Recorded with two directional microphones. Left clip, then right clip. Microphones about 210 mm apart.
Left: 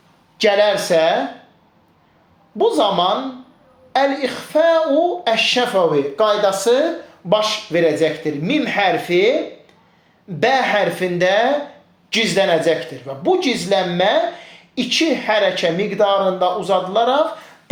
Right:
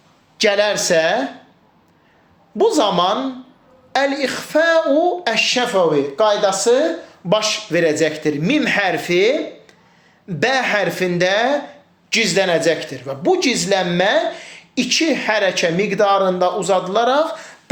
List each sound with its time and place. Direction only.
0.3 s speech: 20° right (ahead or behind)
2.6 s speech: 30° right (ahead or behind)
5.9 s speech: centre (ahead or behind)
7.3 s speech: 30° right (ahead or behind)